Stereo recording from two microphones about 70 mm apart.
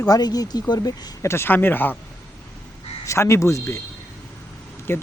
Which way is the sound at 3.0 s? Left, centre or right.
Left.